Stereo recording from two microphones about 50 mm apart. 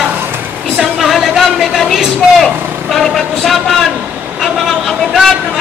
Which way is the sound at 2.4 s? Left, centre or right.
Centre.